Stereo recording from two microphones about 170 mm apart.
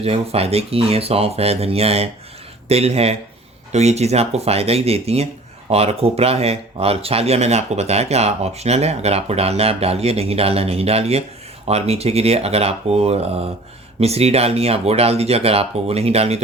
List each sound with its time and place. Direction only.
0.0 s speech: 35° right (ahead or behind)